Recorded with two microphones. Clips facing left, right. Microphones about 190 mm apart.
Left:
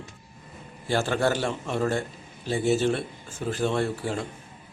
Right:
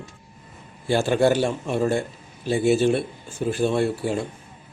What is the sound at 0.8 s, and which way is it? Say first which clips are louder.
Speech: right 5 dB; 15° right (ahead or behind).